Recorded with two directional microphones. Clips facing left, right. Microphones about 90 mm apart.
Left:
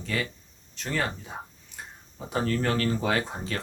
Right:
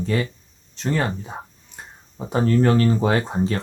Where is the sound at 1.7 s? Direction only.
30° right (ahead or behind).